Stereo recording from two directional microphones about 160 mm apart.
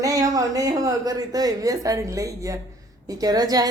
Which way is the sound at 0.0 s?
20° right (ahead or behind).